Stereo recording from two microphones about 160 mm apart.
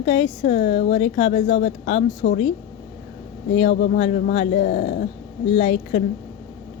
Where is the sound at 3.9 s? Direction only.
55° left (ahead or behind).